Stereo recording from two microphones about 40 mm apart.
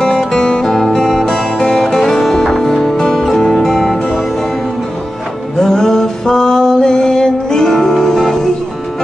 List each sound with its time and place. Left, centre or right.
0.0 s music: centre
5.6 s music: centre